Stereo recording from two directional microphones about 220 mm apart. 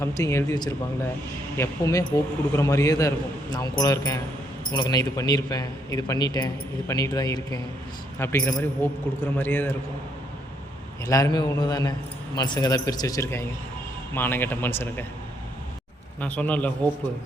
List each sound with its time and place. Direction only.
0.0 s speech: 15° left (ahead or behind)
11.0 s speech: 15° left (ahead or behind)
16.2 s speech: 5° left (ahead or behind)